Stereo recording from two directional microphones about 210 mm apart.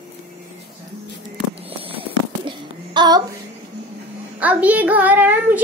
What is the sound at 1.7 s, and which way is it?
Fireworks, 25° right (ahead or behind).